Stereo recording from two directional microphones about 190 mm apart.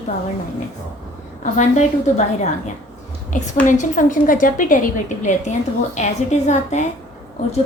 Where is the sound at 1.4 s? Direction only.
40° left (ahead or behind).